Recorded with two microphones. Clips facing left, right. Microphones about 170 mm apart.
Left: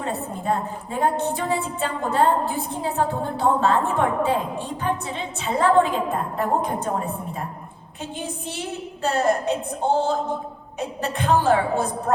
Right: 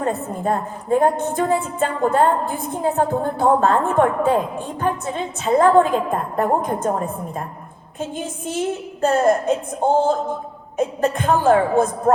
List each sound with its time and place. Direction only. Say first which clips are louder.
0.0 s a woman's voice: right 5 dB; 50° right (ahead or behind)